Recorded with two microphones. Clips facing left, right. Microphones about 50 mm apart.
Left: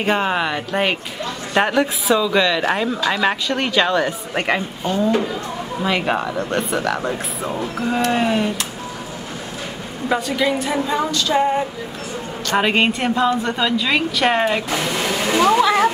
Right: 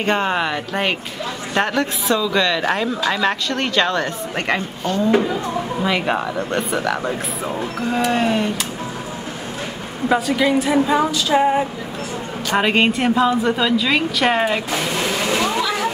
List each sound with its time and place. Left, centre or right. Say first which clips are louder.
0.0 s speech: even; centre
10.0 s speech: right 2 dB; centre
15.2 s speech: left 7 dB; centre
15.6 s a sound: left 6 dB; left